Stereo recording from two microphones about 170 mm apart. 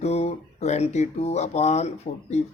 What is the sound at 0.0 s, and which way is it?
Speech, 40° left (ahead or behind).